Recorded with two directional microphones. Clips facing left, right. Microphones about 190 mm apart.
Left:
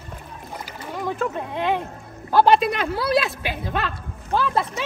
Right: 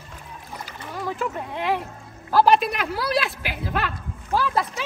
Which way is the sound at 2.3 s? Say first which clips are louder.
Left 1 dB; 25° left (ahead or behind).